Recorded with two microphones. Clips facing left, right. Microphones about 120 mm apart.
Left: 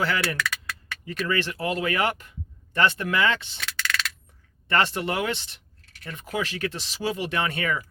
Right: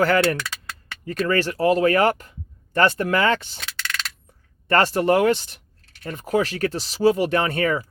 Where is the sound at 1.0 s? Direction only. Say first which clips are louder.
Right 5 dB; 45° right (ahead or behind).